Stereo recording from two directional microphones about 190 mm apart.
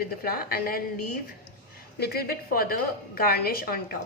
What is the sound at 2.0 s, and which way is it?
A woman's voice, 55° left (ahead or behind).